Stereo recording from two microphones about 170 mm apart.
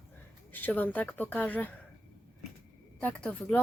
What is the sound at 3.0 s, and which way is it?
Speech, 10° left (ahead or behind).